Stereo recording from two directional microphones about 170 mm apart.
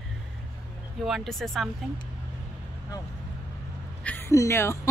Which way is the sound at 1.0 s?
Centre (ahead or behind).